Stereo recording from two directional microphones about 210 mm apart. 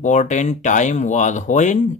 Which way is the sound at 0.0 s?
35° left (ahead or behind).